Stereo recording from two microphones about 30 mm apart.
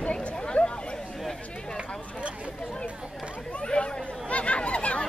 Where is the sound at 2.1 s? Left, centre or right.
Right.